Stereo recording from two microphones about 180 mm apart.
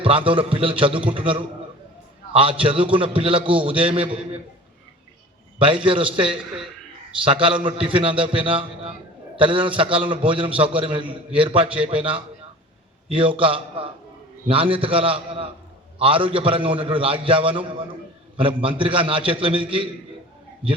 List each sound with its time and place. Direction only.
0.0 s a man's voice: 30° right (ahead or behind)
5.5 s a man's voice: 30° right (ahead or behind)